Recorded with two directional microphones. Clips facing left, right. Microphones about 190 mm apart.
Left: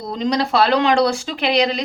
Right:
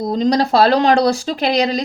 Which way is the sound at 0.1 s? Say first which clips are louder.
Right 3 dB; 40° right (ahead or behind).